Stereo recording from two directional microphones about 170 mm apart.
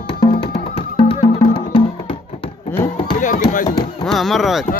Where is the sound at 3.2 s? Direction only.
50° left (ahead or behind).